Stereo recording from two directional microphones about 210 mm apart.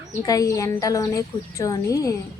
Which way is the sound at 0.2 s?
15° left (ahead or behind).